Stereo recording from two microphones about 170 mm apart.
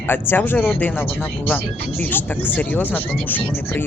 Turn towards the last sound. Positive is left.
turn(degrees=10)  # may be behind; listen again after turning